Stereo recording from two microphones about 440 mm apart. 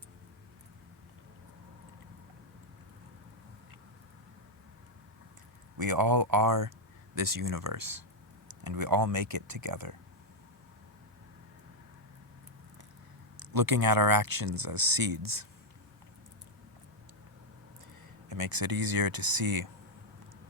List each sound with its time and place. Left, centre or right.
5.8 s speech: right
13.4 s speech: right
18.3 s speech: right